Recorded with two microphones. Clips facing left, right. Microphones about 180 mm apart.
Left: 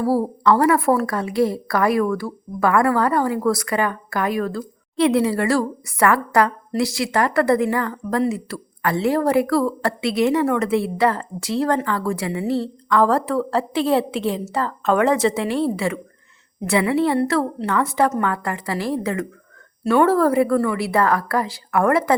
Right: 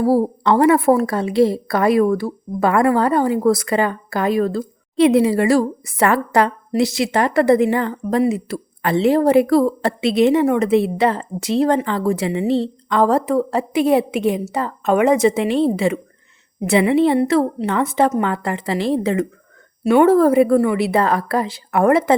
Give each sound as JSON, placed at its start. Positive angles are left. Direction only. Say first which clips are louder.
{"t": 0.0, "sound": "a woman's voice", "louder": "right 3 dB", "side_deg": -20}